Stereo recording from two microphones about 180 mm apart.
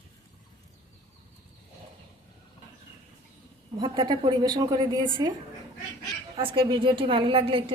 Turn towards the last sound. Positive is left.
turn(degrees=-30)  # may be behind; listen again after turning